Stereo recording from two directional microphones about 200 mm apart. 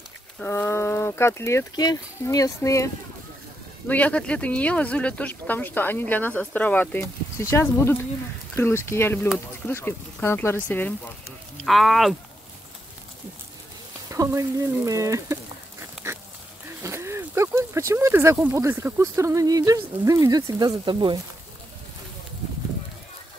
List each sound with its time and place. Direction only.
0.4 s speech: 10° left (ahead or behind)
14.1 s speech: 15° right (ahead or behind)
16.0 s a sound: 15° right (ahead or behind)
16.8 s speech: 15° right (ahead or behind)